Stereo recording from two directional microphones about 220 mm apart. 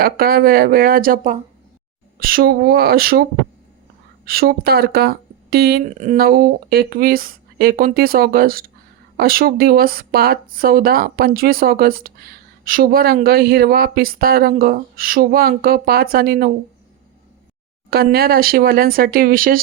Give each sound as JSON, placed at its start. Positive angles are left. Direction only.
{"t": 0.0, "sound": "speech", "side_deg": -45}
{"t": 4.3, "sound": "speech", "side_deg": -45}
{"t": 5.9, "sound": "speech", "side_deg": -35}
{"t": 17.9, "sound": "speech", "side_deg": -45}